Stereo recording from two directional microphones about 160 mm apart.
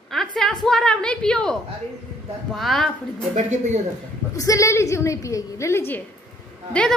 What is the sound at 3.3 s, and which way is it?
Speech, 45° right (ahead or behind).